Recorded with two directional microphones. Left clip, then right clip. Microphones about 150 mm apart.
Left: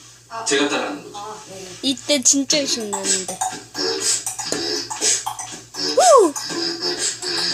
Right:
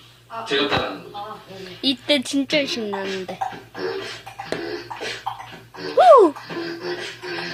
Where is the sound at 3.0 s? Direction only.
45° left (ahead or behind).